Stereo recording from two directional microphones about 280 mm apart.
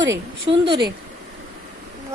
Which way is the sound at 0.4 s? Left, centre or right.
Centre.